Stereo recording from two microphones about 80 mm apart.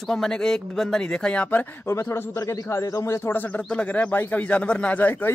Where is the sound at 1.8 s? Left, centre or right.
Left.